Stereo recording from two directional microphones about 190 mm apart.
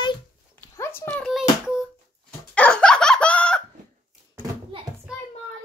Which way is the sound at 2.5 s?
5° left (ahead or behind).